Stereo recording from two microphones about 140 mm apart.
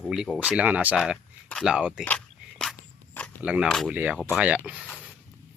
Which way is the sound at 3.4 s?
10° right (ahead or behind).